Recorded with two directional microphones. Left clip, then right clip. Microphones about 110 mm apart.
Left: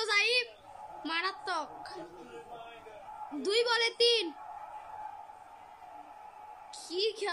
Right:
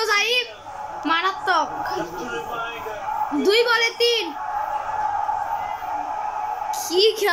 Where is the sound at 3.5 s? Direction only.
35° left (ahead or behind).